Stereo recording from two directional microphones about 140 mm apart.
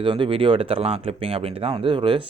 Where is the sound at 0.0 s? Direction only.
35° right (ahead or behind).